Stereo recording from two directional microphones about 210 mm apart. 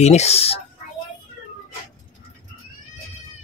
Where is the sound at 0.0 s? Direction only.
30° left (ahead or behind).